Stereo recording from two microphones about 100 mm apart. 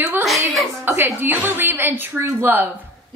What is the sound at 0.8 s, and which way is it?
A woman's voice, 20° right (ahead or behind).